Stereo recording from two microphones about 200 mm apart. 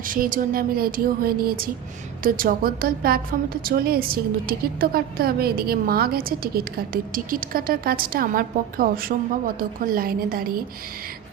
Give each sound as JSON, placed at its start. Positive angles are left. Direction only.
{"t": 0.1, "sound": "a woman's voice", "side_deg": -45}